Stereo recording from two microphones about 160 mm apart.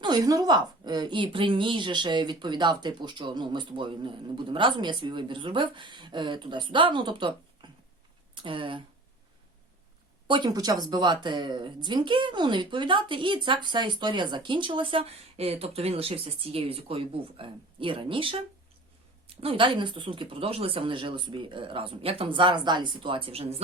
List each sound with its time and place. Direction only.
0.0 s a woman's voice: 25° right (ahead or behind)
10.2 s speech: 30° right (ahead or behind)